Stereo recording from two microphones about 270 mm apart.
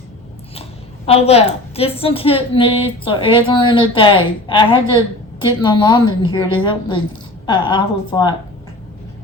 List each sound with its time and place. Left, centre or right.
1.0 s a woman's voice: left